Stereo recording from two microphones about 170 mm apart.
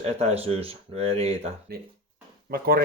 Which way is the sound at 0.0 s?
40° right (ahead or behind).